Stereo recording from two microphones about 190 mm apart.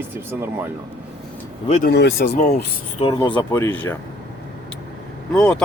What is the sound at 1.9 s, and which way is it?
Speech, 60° left (ahead or behind).